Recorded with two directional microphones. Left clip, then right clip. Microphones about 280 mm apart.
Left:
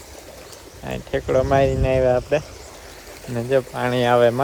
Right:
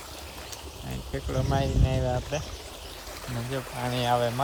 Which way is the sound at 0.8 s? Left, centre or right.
Left.